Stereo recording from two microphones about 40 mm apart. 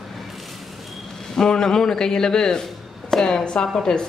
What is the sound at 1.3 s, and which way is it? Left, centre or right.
A woman's voice, centre.